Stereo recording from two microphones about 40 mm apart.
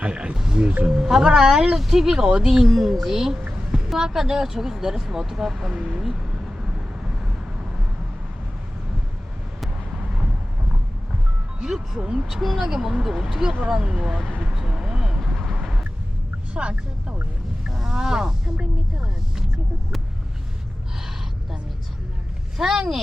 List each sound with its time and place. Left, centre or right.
0.0 s a sound: right
0.3 s a sound: centre
0.9 s speech: centre
5.7 s speech: right
6.0 s vehicle: centre
11.9 s speech: right
12.3 s speech: centre
12.6 s speech: centre
13.7 s speech: centre
14.5 s vehicle: centre
15.2 s vehicle: centre
16.6 s speech: right
17.7 s speech: centre
22.5 s speech: centre